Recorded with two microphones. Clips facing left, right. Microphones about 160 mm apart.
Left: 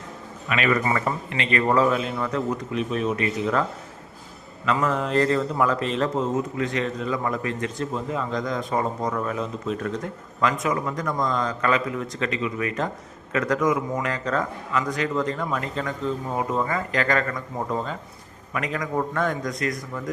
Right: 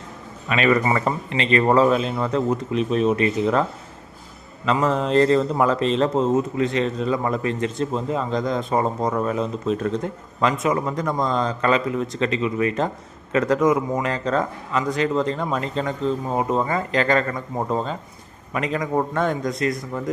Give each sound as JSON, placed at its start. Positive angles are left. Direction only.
{"t": 0.4, "sound": "a man's voice", "side_deg": -30}
{"t": 4.6, "sound": "a man's voice", "side_deg": -25}